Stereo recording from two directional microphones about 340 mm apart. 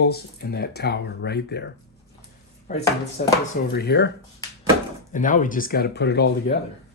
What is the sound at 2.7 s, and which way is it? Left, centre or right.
Speech, left.